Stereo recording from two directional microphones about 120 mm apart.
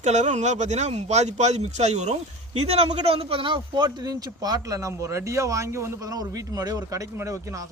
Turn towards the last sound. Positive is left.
turn(degrees=-25)  # may be behind; listen again after turning